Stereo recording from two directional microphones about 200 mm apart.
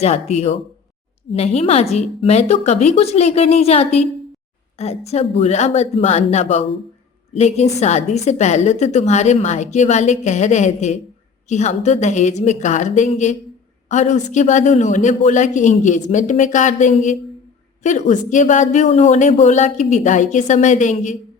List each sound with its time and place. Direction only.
0.0 s a woman's voice: 35° left (ahead or behind)